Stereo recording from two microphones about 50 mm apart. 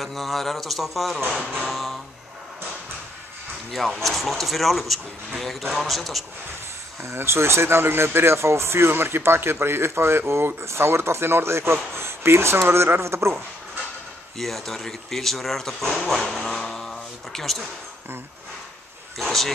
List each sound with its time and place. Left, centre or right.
0.0 s speech: centre
3.7 s speech: centre
7.0 s speech: right
14.4 s speech: centre
16.4 s music: centre
19.2 s speech: centre